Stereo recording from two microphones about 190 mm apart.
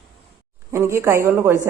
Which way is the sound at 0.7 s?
15° right (ahead or behind).